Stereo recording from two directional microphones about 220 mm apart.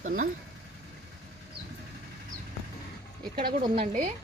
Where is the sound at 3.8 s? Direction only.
40° right (ahead or behind).